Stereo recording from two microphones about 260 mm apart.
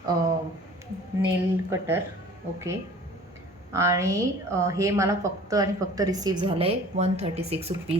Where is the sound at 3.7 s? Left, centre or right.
Centre.